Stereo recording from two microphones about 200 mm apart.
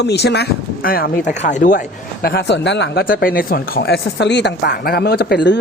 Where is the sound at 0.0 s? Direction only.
55° left (ahead or behind); by 1.8 s 40° left (ahead or behind).